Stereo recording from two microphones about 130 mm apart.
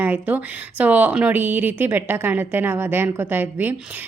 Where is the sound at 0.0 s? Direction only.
15° right (ahead or behind).